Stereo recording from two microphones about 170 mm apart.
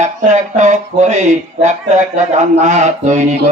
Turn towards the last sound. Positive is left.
turn(degrees=-45)  # may be behind; listen again after turning